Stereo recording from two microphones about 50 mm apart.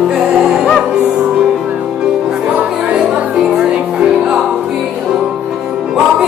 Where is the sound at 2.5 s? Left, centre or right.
Centre.